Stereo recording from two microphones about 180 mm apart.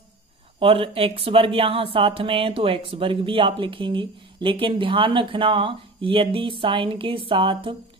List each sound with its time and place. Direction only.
0.6 s speech: 30° right (ahead or behind)